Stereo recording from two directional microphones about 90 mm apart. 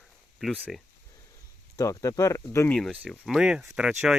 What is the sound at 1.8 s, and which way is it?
Speech, 35° left (ahead or behind).